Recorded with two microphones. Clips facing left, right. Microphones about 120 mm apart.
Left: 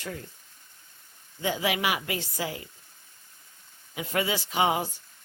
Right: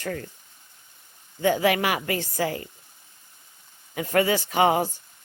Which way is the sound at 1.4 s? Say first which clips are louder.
Right 7 dB; 50° right (ahead or behind).